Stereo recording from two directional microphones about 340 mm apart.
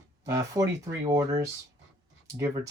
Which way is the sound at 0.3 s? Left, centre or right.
Centre.